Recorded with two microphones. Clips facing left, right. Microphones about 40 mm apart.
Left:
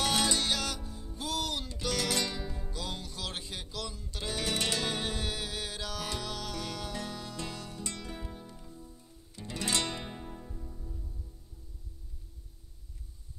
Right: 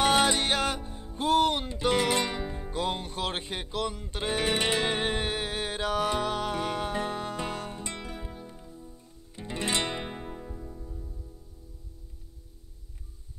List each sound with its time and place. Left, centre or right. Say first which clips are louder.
0.0 s music: right 6 dB; right
8.2 s music: right 3 dB; centre
9.3 s music: right 3 dB; right